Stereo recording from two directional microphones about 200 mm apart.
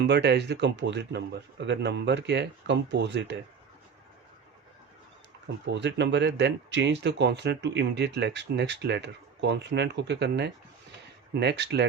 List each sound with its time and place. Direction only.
0.0 s speech: 55° right (ahead or behind)
5.6 s speech: 60° right (ahead or behind)